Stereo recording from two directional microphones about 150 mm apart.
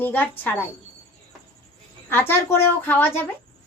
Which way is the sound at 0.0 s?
10° left (ahead or behind).